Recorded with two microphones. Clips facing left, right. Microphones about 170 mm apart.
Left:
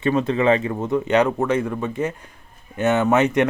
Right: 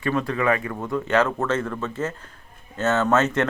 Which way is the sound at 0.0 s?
20° left (ahead or behind).